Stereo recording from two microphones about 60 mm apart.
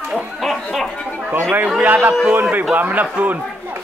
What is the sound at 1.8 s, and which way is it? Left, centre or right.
A man's voice, right.